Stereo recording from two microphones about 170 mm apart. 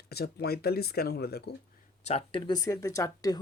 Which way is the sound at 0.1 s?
70° left (ahead or behind).